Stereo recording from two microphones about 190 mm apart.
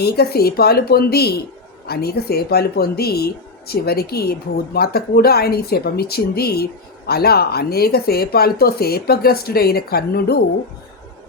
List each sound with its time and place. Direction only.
0.0 s speech: 55° left (ahead or behind)